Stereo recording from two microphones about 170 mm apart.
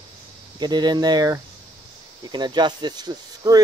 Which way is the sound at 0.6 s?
25° right (ahead or behind).